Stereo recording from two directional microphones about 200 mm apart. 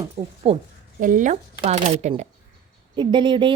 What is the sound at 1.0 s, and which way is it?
Speech, 40° right (ahead or behind).